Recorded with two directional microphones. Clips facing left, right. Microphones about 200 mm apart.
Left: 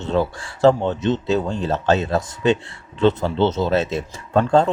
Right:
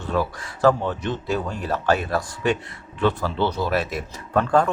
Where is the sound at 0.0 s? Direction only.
25° left (ahead or behind).